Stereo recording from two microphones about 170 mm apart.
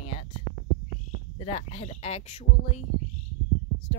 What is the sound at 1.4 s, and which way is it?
A woman's voice, 40° left (ahead or behind).